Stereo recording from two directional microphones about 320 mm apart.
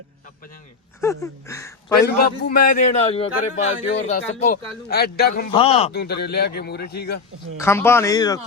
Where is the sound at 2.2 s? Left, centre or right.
Left.